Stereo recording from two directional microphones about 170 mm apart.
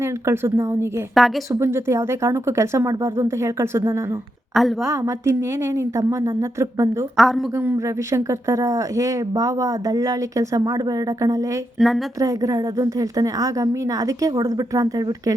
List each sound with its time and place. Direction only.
0.0 s speech: 15° right (ahead or behind)
4.5 s a woman's voice: centre (ahead or behind)
4.9 s speech: 15° right (ahead or behind)
7.2 s a woman's voice: centre (ahead or behind)
7.5 s speech: 15° right (ahead or behind)
11.8 s a woman's voice: centre (ahead or behind)
12.2 s speech: 20° right (ahead or behind)